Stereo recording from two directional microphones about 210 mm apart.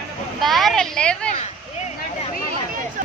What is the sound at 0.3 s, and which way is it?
Speech, centre (ahead or behind).